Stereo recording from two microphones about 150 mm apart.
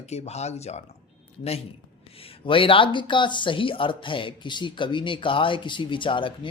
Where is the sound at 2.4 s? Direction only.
35° left (ahead or behind).